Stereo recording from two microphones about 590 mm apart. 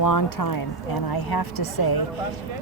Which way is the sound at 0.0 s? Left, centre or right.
Left.